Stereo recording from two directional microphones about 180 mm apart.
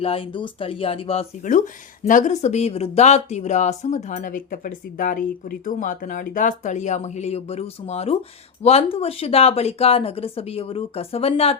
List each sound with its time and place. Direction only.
0.0 s speech: 30° left (ahead or behind)